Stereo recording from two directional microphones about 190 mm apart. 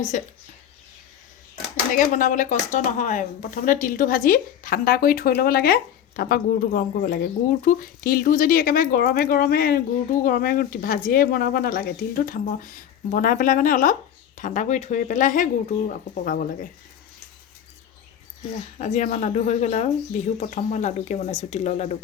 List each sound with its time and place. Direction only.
0.1 s speech: 40° left (ahead or behind)
1.9 s speech: 45° left (ahead or behind)
18.8 s speech: 40° left (ahead or behind)